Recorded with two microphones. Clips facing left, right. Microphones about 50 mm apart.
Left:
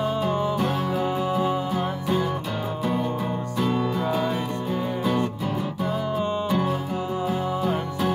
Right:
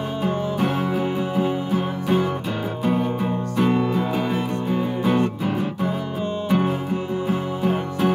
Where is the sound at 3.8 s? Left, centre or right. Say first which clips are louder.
Right 2 dB; centre.